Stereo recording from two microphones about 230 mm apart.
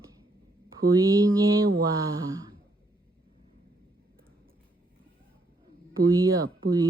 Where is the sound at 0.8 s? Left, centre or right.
Centre.